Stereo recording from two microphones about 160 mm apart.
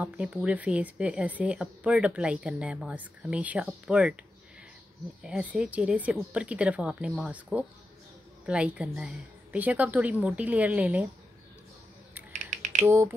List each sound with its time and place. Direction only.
0.0 s speech: 5° right (ahead or behind)
5.2 s speech: 5° right (ahead or behind)
12.3 s finger snapping: 55° right (ahead or behind)
12.8 s speech: 15° right (ahead or behind)